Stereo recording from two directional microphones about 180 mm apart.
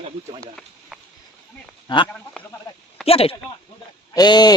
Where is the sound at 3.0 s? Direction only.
30° left (ahead or behind).